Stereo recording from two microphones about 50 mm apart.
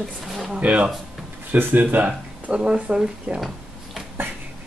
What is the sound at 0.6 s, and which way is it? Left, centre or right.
Speech, right.